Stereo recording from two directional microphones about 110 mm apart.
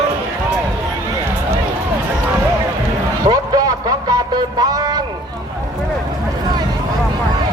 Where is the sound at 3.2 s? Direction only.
35° right (ahead or behind).